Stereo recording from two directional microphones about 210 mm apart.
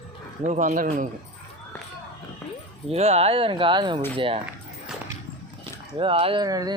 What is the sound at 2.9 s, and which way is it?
Speech, 30° right (ahead or behind).